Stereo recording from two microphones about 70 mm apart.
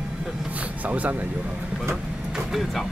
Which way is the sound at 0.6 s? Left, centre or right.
Right.